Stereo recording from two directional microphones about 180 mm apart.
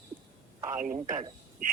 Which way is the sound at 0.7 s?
45° right (ahead or behind).